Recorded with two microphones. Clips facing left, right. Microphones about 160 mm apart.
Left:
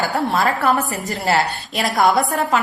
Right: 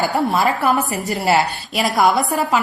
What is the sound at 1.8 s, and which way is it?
Speech, centre (ahead or behind).